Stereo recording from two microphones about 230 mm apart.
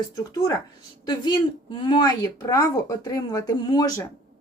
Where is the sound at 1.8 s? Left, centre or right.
Centre.